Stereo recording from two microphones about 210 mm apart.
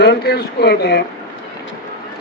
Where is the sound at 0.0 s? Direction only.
50° left (ahead or behind).